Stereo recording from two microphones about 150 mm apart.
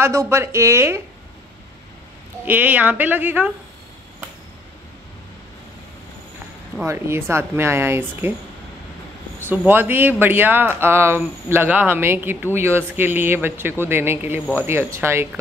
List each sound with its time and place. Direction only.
0.0 s speech: 20° right (ahead or behind)
2.4 s speech: 10° right (ahead or behind)
6.9 s speech: 15° right (ahead or behind)
9.5 s speech: 15° right (ahead or behind)